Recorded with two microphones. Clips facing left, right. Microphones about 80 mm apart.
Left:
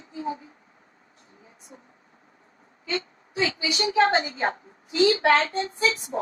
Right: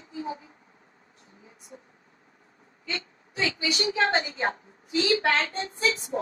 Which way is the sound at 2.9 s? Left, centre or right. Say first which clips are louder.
Left 6 dB; left.